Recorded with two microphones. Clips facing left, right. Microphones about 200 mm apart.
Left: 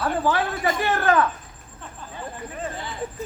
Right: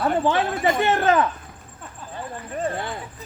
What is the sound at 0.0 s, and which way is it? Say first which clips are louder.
Speech: right 2 dB; 25° right (ahead or behind).